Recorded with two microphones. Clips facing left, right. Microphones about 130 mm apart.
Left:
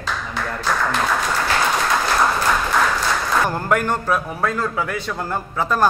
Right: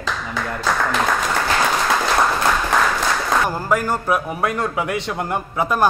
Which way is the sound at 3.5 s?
5° right (ahead or behind).